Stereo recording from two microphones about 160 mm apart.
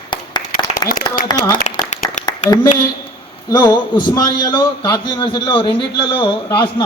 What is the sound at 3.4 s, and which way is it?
A man's voice, 25° left (ahead or behind).